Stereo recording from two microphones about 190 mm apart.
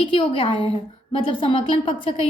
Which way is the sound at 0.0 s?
30° left (ahead or behind).